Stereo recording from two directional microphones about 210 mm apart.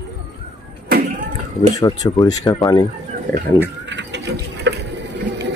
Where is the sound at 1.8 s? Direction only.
15° left (ahead or behind).